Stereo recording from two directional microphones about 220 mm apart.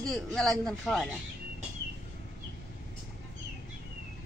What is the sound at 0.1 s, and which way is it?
Speech, centre (ahead or behind).